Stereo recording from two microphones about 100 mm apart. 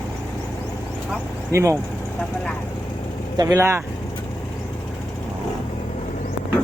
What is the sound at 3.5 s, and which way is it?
Speech, 25° right (ahead or behind).